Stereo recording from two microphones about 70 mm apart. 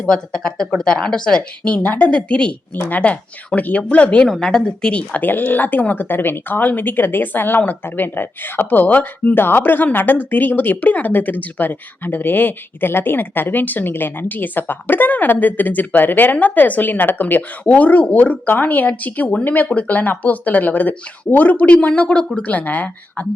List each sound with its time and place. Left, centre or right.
0.0 s speech: centre
2.7 s speech: left
3.0 s speech: centre